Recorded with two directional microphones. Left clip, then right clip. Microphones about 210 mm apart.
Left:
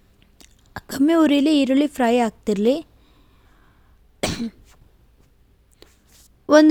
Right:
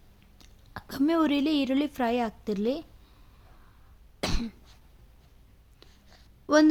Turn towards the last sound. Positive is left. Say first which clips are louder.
# left 8 dB
turn(degrees=35)  # may be behind; listen again after turning